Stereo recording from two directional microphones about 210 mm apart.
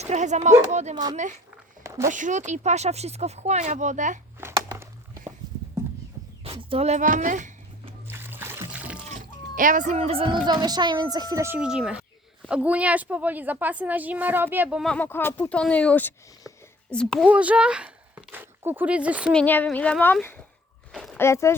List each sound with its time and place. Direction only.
0.0 s speech: 35° right (ahead or behind)
1.8 s a sound: 15° right (ahead or behind)
2.0 s speech: 35° right (ahead or behind)
4.4 s a sound: 10° right (ahead or behind)
6.4 s speech: 25° right (ahead or behind)
8.0 s music: 10° right (ahead or behind)
9.1 s a child's voice: 40° right (ahead or behind); by 17.2 s 5° left (ahead or behind)
17.2 s speech: 5° right (ahead or behind)
19.3 s a woman's voice: 5° left (ahead or behind)
20.9 s a sound: centre (ahead or behind)
21.2 s a woman's voice: 15° left (ahead or behind)